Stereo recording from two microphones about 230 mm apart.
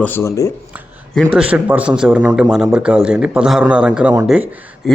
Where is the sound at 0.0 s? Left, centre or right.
Centre.